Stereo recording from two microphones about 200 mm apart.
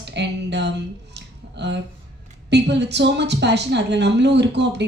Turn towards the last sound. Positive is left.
turn(degrees=-60)  # may be behind; listen again after turning